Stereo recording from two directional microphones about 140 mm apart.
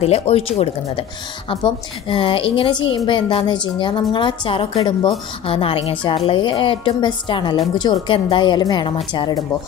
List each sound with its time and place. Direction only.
0.0 s a woman's voice: 45° left (ahead or behind)